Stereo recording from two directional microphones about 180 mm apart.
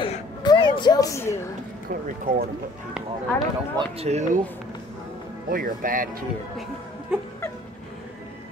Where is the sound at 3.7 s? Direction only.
35° right (ahead or behind).